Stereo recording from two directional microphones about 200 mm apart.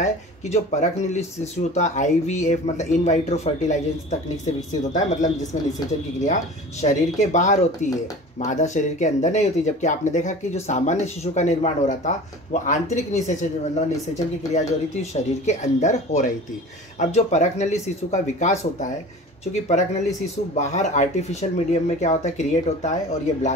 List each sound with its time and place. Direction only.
0.0 s speech: 35° left (ahead or behind)
6.8 s speech: 35° left (ahead or behind)
15.0 s speech: 35° left (ahead or behind)